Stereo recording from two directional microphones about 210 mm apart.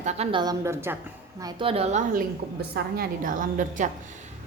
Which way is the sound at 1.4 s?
25° right (ahead or behind).